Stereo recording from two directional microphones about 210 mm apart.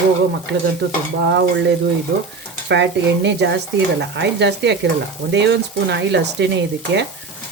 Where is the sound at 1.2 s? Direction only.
55° right (ahead or behind).